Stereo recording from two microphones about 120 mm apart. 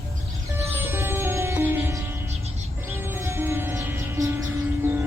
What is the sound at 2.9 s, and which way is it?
Music, 20° right (ahead or behind).